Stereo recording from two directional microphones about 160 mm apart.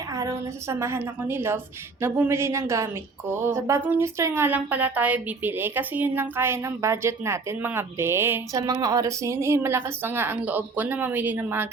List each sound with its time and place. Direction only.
0.1 s a woman's voice: 20° right (ahead or behind)